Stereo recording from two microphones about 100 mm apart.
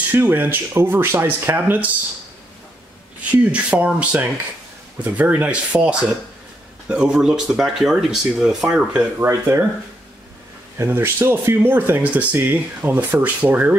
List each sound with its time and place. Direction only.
0.1 s speech: 20° right (ahead or behind)
3.3 s speech: 15° right (ahead or behind)
9.2 s speech: 25° right (ahead or behind)
10.8 s speech: 25° right (ahead or behind)